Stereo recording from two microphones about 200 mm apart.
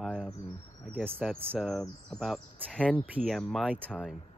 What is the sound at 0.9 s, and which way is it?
Speech, 10° right (ahead or behind).